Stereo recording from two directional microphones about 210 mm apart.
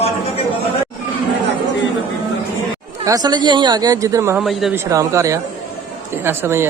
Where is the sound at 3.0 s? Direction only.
20° right (ahead or behind).